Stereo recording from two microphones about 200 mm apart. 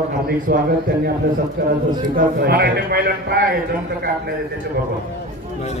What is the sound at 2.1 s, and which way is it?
Speech, 45° right (ahead or behind).